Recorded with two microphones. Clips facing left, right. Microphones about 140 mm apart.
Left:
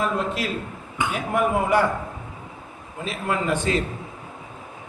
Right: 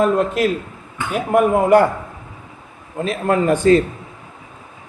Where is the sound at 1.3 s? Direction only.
50° right (ahead or behind).